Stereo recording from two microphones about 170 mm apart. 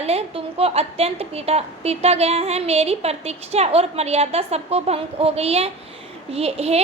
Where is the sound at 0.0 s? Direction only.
35° right (ahead or behind).